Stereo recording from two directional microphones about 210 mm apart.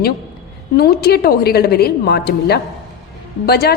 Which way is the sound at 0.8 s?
45° left (ahead or behind).